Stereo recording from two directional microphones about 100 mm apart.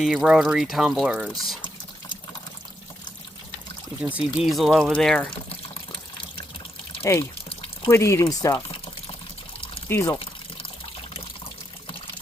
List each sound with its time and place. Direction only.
0.0 s speech: 5° right (ahead or behind)
1.3 s speech: centre (ahead or behind)
4.4 s speech: centre (ahead or behind)
5.5 s water: 65° left (ahead or behind)
7.0 s speech: 30° left (ahead or behind)
7.5 s water: 70° left (ahead or behind)
7.9 s speech: 30° left (ahead or behind)
8.5 s speech: 65° left (ahead or behind)
9.9 s speech: 20° left (ahead or behind)